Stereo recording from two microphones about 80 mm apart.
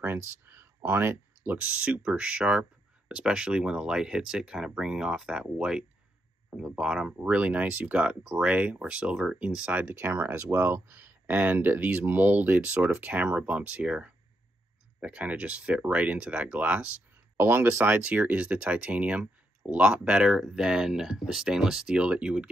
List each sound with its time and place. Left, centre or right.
0.0 s speech: right
17.4 s speech: right; by 22.5 s centre